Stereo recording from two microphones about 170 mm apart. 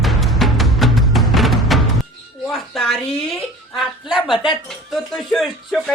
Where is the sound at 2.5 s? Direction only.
Centre (ahead or behind).